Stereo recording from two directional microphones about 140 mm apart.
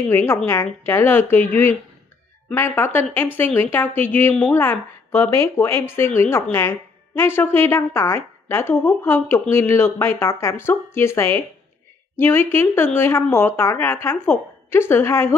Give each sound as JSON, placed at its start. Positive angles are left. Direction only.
{"t": 0.1, "sound": "a woman's voice", "side_deg": 15}